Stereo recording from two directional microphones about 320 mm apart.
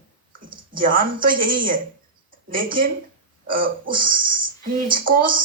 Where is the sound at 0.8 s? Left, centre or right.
Right.